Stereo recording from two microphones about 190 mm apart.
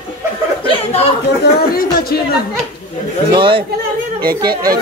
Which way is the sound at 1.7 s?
50° left (ahead or behind).